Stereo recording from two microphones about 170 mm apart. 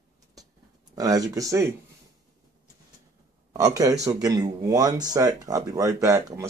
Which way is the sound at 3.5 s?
20° right (ahead or behind).